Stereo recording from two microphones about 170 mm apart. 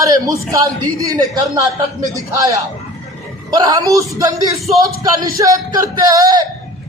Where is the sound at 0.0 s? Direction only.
20° right (ahead or behind).